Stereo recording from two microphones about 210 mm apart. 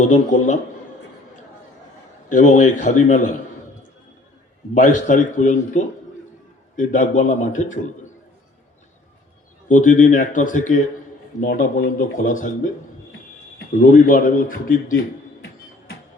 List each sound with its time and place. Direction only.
0.0 s a man's voice: 35° left (ahead or behind)
2.3 s a man's voice: 35° left (ahead or behind)
4.7 s a man's voice: 35° left (ahead or behind)
9.6 s a man's voice: 35° left (ahead or behind)
13.9 s a man's voice: 40° left (ahead or behind)